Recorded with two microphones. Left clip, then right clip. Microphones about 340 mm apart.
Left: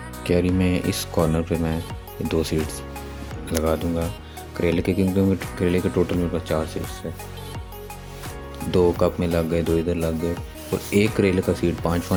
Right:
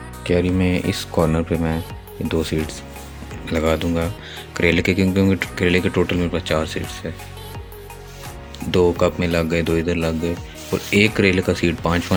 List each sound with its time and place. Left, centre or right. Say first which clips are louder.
0.3 s speech: right 2 dB; left
8.7 s speech: right 2 dB; left